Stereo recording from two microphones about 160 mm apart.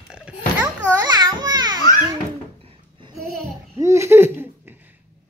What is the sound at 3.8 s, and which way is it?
Laughter, 15° right (ahead or behind).